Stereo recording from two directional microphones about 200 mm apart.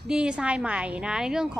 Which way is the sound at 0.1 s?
5° right (ahead or behind).